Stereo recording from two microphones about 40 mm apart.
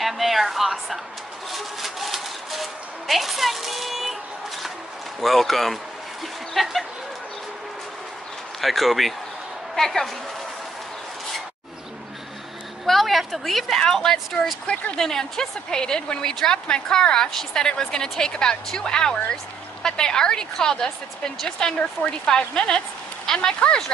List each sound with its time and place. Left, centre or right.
0.0 s a woman's voice: centre
1.5 s music: centre
5.2 s a woman's voice: centre
8.5 s a woman's voice: centre
12.8 s a woman's voice: centre
23.2 s a sound: centre